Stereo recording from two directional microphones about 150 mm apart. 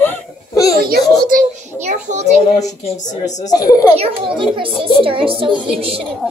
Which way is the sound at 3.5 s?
25° left (ahead or behind).